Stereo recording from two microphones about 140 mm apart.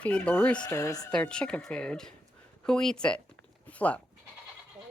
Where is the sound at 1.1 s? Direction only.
5° left (ahead or behind).